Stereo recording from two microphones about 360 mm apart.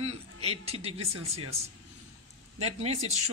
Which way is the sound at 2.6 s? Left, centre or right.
Centre.